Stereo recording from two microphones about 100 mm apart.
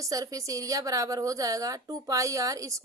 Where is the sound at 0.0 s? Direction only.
35° right (ahead or behind).